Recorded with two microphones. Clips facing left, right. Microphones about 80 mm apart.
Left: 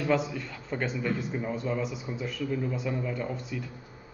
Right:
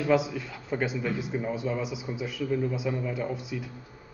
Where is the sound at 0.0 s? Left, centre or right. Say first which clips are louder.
Right 2 dB; centre.